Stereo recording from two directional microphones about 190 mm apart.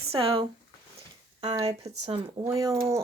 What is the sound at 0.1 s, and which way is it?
Speech, 30° right (ahead or behind).